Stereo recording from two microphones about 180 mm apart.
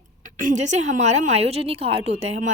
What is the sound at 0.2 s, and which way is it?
A woman's voice, 45° right (ahead or behind).